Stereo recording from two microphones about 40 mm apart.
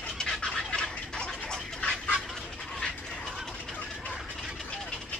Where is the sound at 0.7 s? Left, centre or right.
Centre.